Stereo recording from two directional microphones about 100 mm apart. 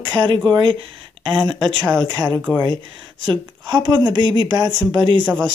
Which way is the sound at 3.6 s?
45° right (ahead or behind).